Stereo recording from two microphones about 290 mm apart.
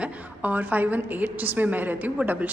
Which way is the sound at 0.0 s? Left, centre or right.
Centre.